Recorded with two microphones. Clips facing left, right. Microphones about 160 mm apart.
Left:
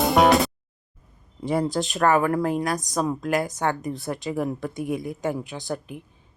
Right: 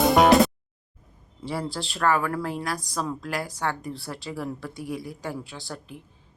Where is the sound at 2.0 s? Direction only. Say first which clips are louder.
Left 3 dB; 50° left (ahead or behind).